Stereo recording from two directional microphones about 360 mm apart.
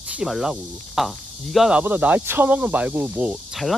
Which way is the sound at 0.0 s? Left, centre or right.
Centre.